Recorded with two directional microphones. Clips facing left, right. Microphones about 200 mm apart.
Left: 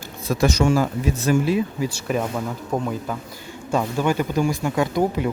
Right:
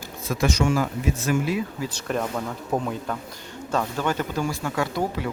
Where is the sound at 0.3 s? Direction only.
40° left (ahead or behind).